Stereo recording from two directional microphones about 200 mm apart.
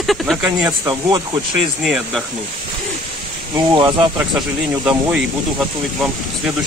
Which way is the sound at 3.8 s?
20° right (ahead or behind).